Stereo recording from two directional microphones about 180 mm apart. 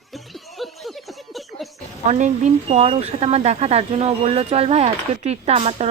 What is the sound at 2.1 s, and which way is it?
Speech, 40° right (ahead or behind).